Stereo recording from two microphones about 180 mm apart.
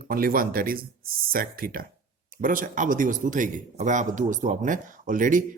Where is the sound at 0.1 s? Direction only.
55° right (ahead or behind).